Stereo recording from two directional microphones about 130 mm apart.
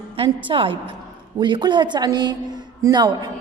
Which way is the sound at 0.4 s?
40° right (ahead or behind).